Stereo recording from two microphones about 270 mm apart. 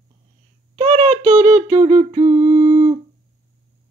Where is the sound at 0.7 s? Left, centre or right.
Right.